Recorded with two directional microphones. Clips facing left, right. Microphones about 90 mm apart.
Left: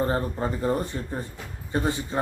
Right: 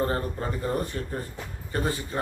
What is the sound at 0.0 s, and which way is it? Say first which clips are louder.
Speech: left 2 dB; 20° left (ahead or behind).